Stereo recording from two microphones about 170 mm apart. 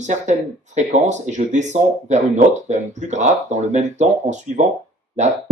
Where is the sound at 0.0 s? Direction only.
45° right (ahead or behind).